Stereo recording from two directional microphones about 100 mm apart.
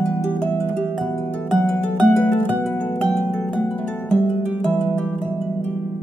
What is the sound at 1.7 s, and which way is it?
Harp, 10° left (ahead or behind).